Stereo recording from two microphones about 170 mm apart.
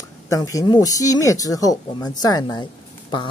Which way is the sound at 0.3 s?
20° left (ahead or behind).